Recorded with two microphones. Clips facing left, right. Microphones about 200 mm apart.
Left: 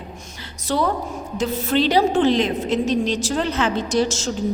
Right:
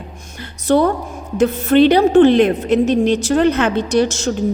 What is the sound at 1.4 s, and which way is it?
A woman's voice, 60° right (ahead or behind).